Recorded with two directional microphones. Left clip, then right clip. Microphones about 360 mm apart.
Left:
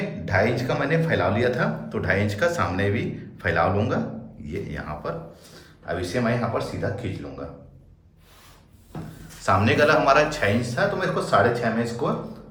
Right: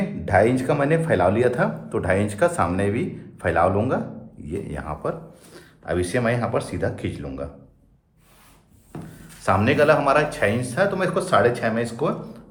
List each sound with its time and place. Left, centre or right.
0.3 s speech: centre
5.8 s speech: right
9.4 s speech: centre